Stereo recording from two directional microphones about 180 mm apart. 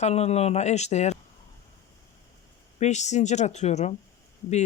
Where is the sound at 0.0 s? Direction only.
35° left (ahead or behind).